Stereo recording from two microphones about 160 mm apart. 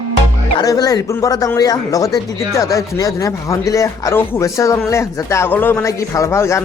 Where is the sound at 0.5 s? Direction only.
25° left (ahead or behind).